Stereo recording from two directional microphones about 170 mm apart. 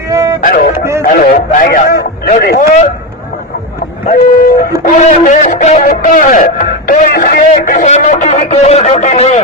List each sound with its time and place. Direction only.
0.1 s music: 20° right (ahead or behind)
0.4 s a man's voice: 50° left (ahead or behind)
4.8 s a man's voice: 45° left (ahead or behind)